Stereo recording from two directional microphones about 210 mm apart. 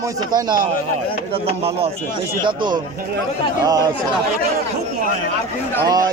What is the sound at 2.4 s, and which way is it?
Speech, 20° right (ahead or behind).